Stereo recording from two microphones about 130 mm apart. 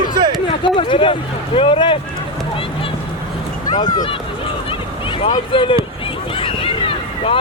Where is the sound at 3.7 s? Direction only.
35° left (ahead or behind).